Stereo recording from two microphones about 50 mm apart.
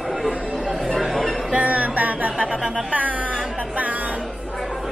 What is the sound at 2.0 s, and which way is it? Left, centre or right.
Speech, right.